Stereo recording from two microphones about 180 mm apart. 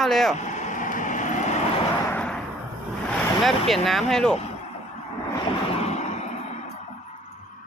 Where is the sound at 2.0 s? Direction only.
5° left (ahead or behind).